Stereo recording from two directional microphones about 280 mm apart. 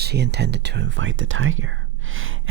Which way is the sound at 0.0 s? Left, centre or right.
Right.